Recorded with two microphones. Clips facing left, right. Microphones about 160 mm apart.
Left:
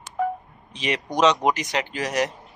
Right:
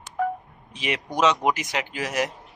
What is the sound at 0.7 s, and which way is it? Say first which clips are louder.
Speech: left 2 dB; 10° right (ahead or behind).